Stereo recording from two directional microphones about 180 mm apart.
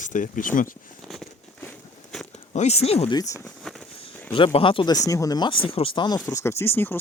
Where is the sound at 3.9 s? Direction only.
30° left (ahead or behind).